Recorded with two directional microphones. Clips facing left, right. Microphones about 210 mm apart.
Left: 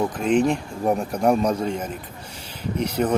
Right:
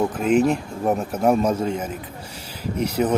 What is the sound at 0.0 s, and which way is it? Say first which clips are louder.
Speech: right 1 dB; 5° right (ahead or behind).